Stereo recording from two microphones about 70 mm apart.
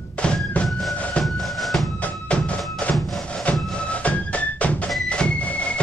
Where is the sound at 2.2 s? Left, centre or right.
Centre.